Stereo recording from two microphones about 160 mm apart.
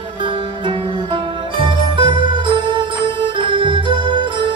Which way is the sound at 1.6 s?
30° right (ahead or behind).